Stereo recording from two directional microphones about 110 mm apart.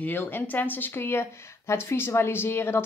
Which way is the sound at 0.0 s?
15° left (ahead or behind).